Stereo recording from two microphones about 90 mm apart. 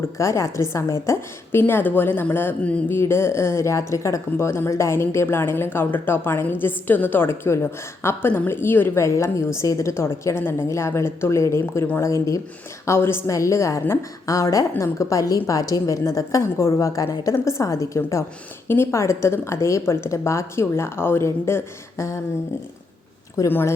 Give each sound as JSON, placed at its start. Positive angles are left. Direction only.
{"t": 0.2, "sound": "a woman's voice", "side_deg": 35}
{"t": 23.5, "sound": "speech", "side_deg": 25}